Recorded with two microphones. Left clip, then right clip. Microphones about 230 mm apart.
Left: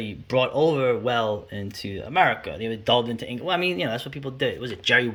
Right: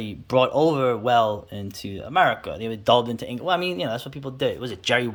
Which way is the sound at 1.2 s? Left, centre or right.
Right.